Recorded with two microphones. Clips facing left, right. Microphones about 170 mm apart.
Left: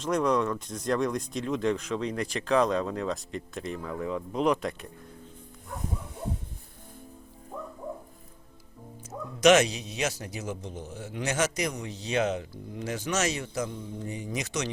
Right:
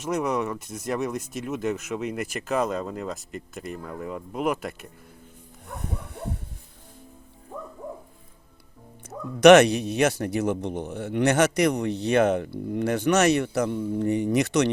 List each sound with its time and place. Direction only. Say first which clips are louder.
0.0 s speech: even; 10° right (ahead or behind)
5.8 s dog: right 2 dB; 65° right (ahead or behind)
9.0 s speech: right 7 dB; 65° right (ahead or behind)